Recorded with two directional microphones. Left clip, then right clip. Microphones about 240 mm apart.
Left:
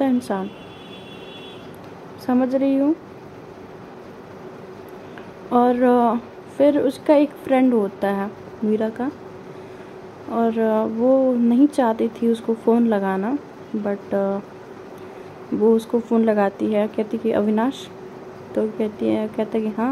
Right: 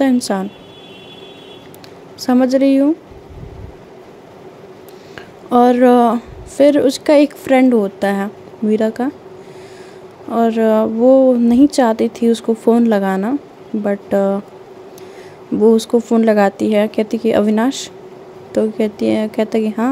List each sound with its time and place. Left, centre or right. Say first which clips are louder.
0.0 s speech: right 6 dB; right
2.1 s speech: right 7 dB; right
5.5 s speech: right 6 dB; right
10.3 s speech: right 6 dB; right
15.9 s speech: right 6 dB; right